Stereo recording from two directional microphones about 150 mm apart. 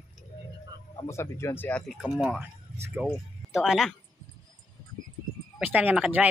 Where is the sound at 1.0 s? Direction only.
20° left (ahead or behind).